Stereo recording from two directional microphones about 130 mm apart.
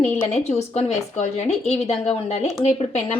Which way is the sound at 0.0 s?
55° left (ahead or behind).